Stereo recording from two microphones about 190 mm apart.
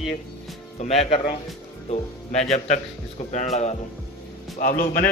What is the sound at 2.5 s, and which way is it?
A man's voice, 35° left (ahead or behind).